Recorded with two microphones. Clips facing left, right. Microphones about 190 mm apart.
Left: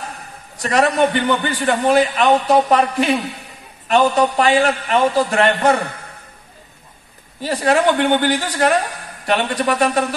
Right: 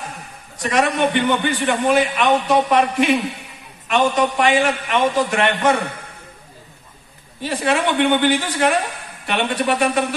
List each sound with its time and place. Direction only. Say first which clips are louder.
0.6 s a man's voice: left 3 dB; 35° left (ahead or behind)
7.4 s a man's voice: left 4 dB; 40° left (ahead or behind)